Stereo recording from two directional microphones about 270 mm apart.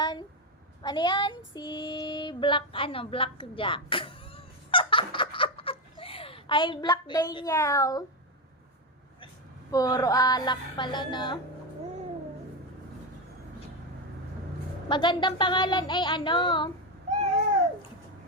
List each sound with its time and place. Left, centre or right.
0.0 s a sound: centre
0.8 s female singing: centre
9.7 s speech: centre
14.8 s speech: centre